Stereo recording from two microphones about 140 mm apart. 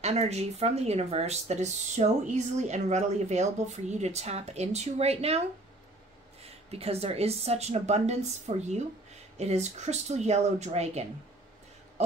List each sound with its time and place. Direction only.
0.0 s speech: 50° right (ahead or behind)
6.4 s speech: 45° right (ahead or behind)